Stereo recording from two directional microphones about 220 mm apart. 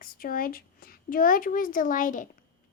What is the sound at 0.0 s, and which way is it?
Speech, 40° left (ahead or behind).